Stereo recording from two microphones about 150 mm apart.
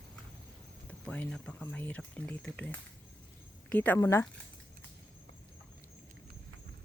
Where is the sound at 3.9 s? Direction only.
20° left (ahead or behind).